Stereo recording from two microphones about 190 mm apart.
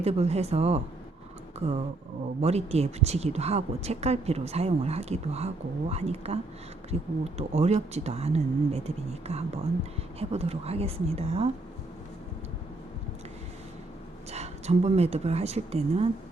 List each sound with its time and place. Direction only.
0.0 s a woman's voice: 35° right (ahead or behind)
14.3 s speech: 35° right (ahead or behind)